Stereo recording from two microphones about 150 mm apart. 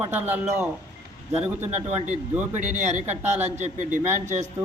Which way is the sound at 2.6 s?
50° right (ahead or behind).